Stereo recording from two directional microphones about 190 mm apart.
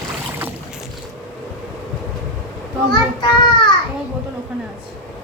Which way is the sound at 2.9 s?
25° left (ahead or behind).